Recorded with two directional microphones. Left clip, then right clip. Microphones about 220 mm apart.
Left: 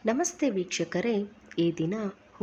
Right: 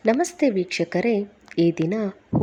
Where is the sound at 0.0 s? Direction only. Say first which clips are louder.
Right 7 dB; 20° right (ahead or behind).